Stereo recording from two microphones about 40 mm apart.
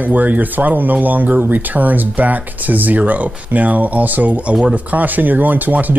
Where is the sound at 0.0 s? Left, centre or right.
Right.